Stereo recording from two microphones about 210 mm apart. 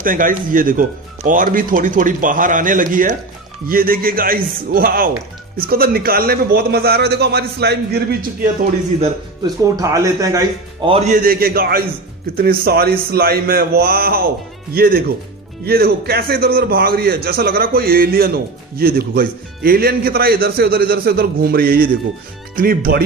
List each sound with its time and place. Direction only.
0.0 s a man's voice: 40° right (ahead or behind)
9.4 s speech: 15° right (ahead or behind)
11.1 s a man's voice: 45° right (ahead or behind)